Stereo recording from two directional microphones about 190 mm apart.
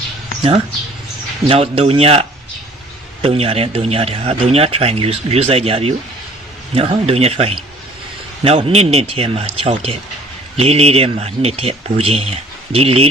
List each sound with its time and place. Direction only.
1.5 s a man's voice: 30° right (ahead or behind)